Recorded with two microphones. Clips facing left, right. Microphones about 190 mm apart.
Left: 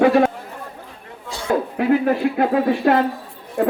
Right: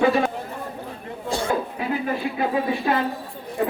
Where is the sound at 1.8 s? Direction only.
65° left (ahead or behind).